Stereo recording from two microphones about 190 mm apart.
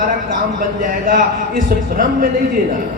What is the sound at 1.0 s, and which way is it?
Speech, 50° right (ahead or behind).